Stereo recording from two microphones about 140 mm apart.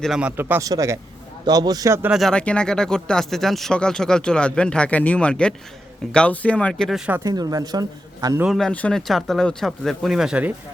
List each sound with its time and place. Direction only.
0.0 s speech: 5° right (ahead or behind); by 2.0 s 20° right (ahead or behind)
2.0 s speech: centre (ahead or behind)
7.3 s speech: 25° right (ahead or behind)
8.4 s speech: centre (ahead or behind)